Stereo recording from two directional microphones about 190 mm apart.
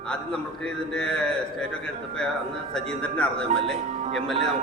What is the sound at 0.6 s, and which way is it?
Speech, 5° left (ahead or behind).